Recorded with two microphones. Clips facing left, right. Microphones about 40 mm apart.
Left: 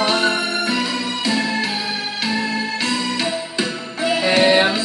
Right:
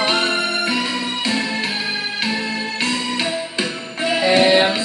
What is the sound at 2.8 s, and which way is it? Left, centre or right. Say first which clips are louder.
Music: right 2 dB; centre.